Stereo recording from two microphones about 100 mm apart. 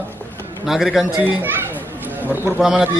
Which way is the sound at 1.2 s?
20° right (ahead or behind).